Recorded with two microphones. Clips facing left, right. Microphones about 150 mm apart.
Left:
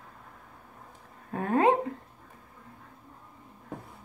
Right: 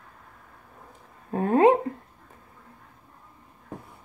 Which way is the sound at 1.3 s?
30° right (ahead or behind).